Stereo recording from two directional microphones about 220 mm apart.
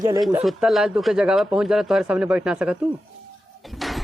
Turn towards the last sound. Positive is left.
turn(degrees=0)  # may be behind; listen again after turning